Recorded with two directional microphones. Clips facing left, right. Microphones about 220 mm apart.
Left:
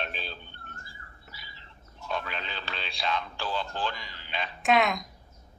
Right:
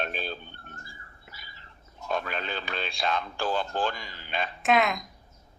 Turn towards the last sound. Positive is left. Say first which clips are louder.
# even
turn(degrees=0)  # may be behind; listen again after turning